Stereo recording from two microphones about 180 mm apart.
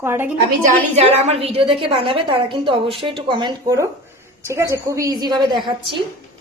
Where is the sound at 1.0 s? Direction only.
35° right (ahead or behind).